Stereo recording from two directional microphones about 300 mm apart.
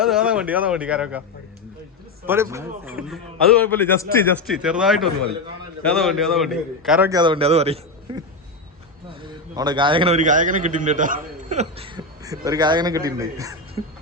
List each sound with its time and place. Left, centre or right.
0.0 s a man's voice: centre
2.2 s a man's voice: centre
3.7 s a man's voice: centre
9.2 s a man's voice: centre